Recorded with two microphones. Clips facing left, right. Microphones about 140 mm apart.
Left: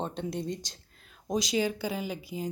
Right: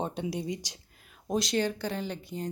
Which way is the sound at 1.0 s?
Centre (ahead or behind).